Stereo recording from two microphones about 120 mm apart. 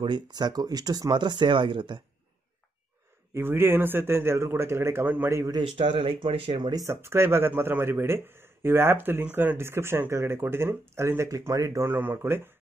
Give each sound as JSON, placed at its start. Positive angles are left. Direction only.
{"t": 0.0, "sound": "speech", "side_deg": -40}
{"t": 3.3, "sound": "speech", "side_deg": -20}
{"t": 5.6, "sound": "speech", "side_deg": -45}
{"t": 6.7, "sound": "speech", "side_deg": -25}